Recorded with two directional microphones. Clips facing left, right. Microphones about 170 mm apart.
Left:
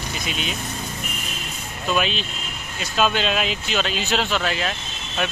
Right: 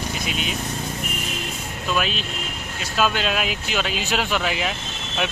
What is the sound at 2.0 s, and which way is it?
Speech, 5° right (ahead or behind).